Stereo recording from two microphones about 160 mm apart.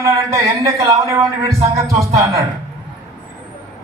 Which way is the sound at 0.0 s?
20° right (ahead or behind).